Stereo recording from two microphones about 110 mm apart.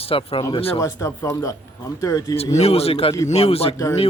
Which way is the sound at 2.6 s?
65° left (ahead or behind).